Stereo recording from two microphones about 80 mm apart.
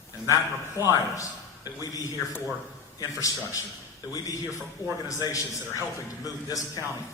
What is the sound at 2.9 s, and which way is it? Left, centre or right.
A man's voice, left.